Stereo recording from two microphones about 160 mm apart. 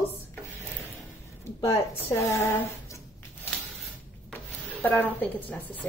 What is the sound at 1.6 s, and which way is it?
A woman's voice, 20° left (ahead or behind).